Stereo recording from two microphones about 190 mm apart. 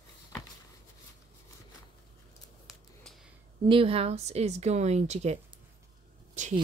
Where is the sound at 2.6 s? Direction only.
Centre (ahead or behind).